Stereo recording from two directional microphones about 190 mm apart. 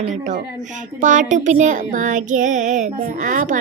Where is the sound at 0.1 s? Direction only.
40° right (ahead or behind).